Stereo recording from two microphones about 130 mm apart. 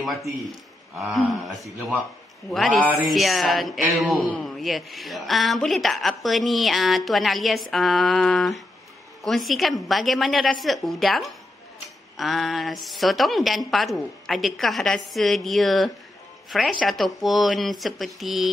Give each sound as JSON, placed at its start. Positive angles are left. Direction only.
{"t": 0.0, "sound": "a man's voice", "side_deg": 0}